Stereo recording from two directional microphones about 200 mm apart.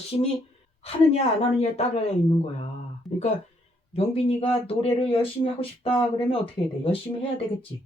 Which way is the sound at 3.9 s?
30° left (ahead or behind).